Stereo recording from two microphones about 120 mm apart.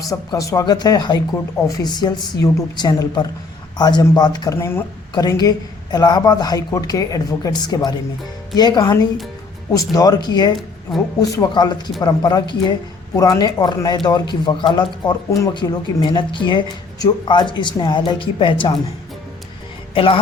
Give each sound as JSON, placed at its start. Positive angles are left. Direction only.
{"t": 0.0, "sound": "speech", "side_deg": 30}
{"t": 4.5, "sound": "speech", "side_deg": 20}
{"t": 5.1, "sound": "speech", "side_deg": 35}
{"t": 19.9, "sound": "speech", "side_deg": 50}